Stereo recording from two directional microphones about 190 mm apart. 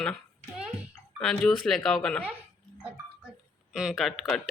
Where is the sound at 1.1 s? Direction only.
Centre (ahead or behind).